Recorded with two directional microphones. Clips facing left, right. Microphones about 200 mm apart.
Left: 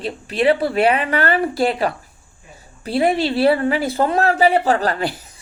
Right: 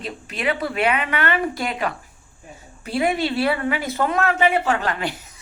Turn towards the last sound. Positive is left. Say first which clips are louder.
# left 4 dB
turn(degrees=35)  # may be behind; listen again after turning